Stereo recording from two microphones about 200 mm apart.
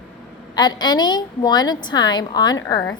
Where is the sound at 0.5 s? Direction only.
20° left (ahead or behind).